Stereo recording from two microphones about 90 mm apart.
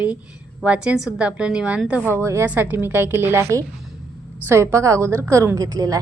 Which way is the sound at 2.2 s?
30° right (ahead or behind).